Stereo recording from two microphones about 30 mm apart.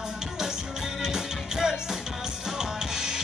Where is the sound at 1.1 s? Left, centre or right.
Centre.